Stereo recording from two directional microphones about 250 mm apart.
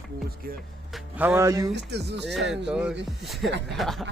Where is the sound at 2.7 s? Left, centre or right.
Centre.